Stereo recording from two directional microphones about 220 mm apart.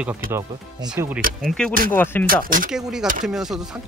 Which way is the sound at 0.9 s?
10° right (ahead or behind).